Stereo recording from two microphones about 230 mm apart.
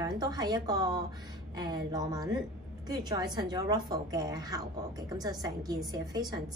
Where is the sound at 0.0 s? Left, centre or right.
Centre.